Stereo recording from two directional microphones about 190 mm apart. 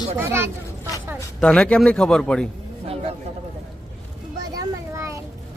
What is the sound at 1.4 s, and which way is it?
A man's voice, 5° left (ahead or behind).